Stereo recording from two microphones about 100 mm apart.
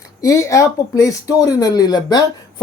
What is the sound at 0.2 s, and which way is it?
Speech, 30° left (ahead or behind).